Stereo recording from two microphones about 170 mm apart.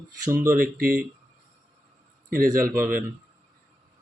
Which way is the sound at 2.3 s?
55° right (ahead or behind).